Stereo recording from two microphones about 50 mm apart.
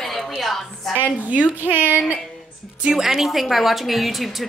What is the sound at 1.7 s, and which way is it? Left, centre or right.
Child singing, right.